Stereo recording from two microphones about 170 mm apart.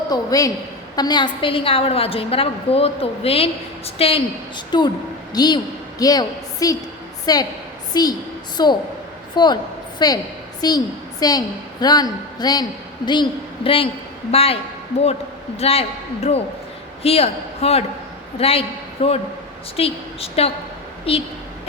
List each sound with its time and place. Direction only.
0.1 s a woman's voice: 20° left (ahead or behind)
14.3 s a woman's voice: 35° left (ahead or behind)